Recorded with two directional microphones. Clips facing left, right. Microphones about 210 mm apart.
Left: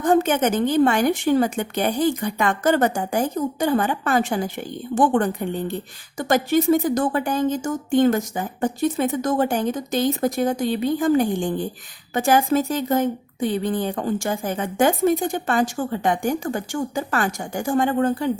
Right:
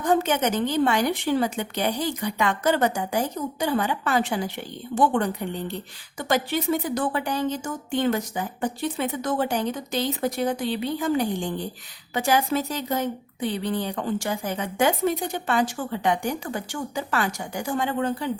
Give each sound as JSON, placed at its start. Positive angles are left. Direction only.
{"t": 0.0, "sound": "speech", "side_deg": 50}